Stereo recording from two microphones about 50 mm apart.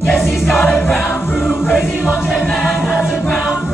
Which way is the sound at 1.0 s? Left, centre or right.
Left.